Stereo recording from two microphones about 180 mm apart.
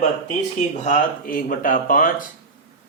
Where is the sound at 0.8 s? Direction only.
45° left (ahead or behind).